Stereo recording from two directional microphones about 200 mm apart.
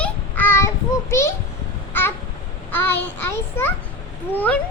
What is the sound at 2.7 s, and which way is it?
A child's voice, 10° left (ahead or behind).